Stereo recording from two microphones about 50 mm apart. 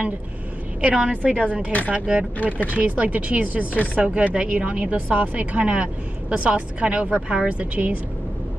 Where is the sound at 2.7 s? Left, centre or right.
Right.